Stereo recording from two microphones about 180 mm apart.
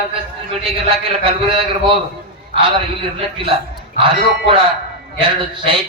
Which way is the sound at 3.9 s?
30° right (ahead or behind).